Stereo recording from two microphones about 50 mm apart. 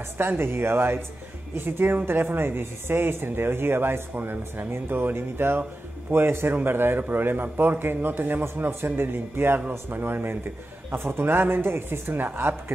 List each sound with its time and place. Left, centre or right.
0.2 s speech: right